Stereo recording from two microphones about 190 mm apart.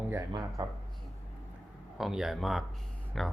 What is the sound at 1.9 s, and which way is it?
Speech, centre (ahead or behind).